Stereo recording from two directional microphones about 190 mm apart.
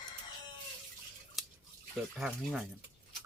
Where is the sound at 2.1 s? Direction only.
5° right (ahead or behind).